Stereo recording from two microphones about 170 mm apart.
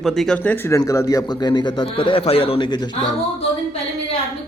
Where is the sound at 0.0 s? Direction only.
Centre (ahead or behind); by 3.2 s 25° left (ahead or behind).